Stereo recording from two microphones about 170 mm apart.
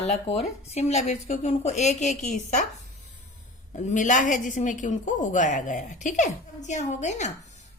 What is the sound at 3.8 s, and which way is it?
A woman's voice, 45° left (ahead or behind).